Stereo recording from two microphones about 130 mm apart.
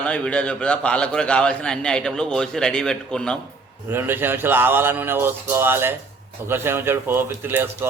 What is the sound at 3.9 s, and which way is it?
Speech, 15° right (ahead or behind).